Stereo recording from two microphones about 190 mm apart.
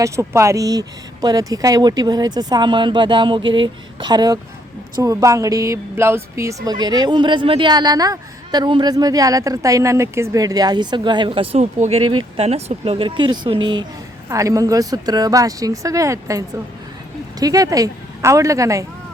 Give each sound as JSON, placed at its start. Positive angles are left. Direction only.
{"t": 0.0, "sound": "speech", "side_deg": -15}
{"t": 17.4, "sound": "speech", "side_deg": -20}